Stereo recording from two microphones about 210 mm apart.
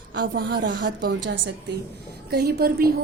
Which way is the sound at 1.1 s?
55° right (ahead or behind).